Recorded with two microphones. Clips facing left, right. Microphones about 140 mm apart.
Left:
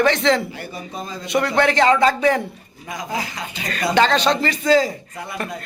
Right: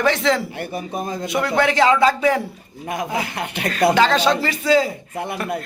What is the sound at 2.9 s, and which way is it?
Speech, 60° right (ahead or behind).